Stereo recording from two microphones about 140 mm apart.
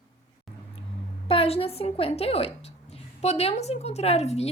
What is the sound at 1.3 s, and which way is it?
A woman's voice, 45° left (ahead or behind).